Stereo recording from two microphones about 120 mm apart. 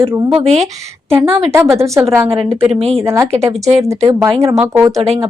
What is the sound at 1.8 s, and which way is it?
Speech, 25° right (ahead or behind).